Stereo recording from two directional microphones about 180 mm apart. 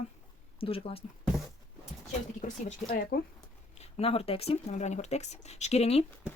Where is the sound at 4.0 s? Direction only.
30° left (ahead or behind).